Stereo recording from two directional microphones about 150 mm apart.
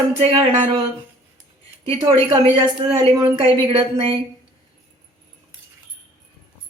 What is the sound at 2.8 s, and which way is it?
A woman's voice, 35° right (ahead or behind).